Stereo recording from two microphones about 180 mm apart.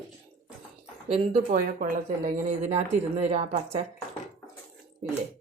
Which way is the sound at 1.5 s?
50° right (ahead or behind).